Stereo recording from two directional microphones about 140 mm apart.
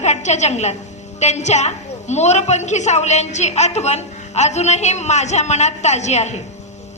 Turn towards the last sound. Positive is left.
turn(degrees=55)  # may be behind; listen again after turning